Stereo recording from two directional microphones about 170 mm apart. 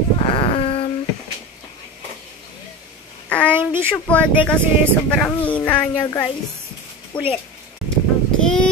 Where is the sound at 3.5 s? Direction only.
15° right (ahead or behind).